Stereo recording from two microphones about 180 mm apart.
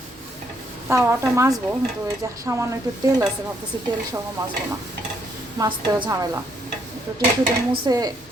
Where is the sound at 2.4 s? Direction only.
15° right (ahead or behind).